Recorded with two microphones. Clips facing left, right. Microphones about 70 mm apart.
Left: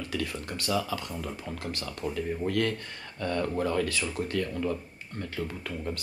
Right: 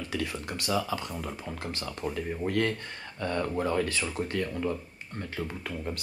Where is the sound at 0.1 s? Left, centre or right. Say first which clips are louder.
Right 1 dB; right.